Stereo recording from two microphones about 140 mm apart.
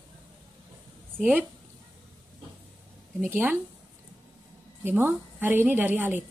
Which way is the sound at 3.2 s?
15° right (ahead or behind).